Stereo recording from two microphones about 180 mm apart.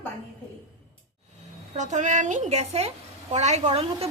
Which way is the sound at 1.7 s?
40° right (ahead or behind).